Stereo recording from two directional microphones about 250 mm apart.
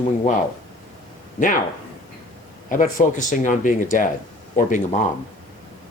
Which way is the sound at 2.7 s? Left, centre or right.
Left.